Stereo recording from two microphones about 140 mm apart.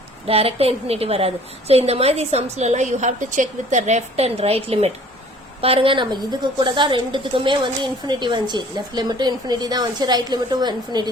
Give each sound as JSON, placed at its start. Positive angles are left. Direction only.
{"t": 0.3, "sound": "a woman's voice", "side_deg": -45}